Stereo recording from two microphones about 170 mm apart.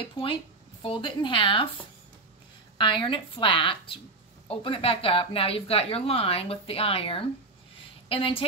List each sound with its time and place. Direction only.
0.0 s a woman's voice: 30° left (ahead or behind)
2.8 s speech: 30° left (ahead or behind)